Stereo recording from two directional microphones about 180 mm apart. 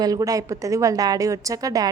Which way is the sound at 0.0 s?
20° right (ahead or behind).